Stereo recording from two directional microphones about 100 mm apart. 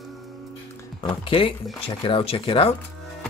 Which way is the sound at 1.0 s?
60° left (ahead or behind).